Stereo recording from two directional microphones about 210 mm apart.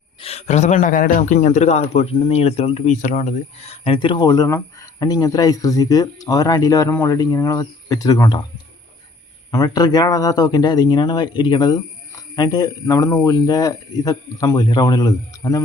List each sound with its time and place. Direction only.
0.2 s a man's voice: 30° left (ahead or behind)
9.5 s a man's voice: 15° left (ahead or behind)